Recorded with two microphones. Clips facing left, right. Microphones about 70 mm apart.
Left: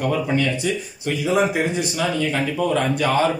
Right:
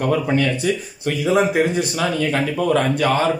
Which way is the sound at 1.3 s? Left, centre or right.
Right.